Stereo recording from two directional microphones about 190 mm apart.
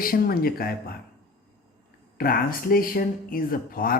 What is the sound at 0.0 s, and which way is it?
Speech, 50° left (ahead or behind).